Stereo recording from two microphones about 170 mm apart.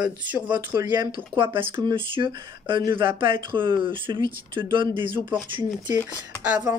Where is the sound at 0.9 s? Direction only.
25° right (ahead or behind).